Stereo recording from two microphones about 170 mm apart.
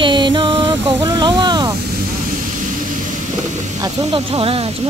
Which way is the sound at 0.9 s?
20° right (ahead or behind).